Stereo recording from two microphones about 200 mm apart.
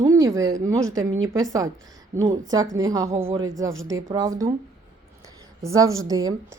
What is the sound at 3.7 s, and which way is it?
Speech, 75° right (ahead or behind).